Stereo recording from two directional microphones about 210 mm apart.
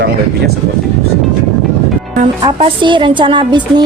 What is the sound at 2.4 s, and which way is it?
A woman's voice, 20° right (ahead or behind).